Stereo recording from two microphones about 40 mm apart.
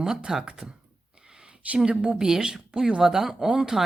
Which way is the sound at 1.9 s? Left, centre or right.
Right.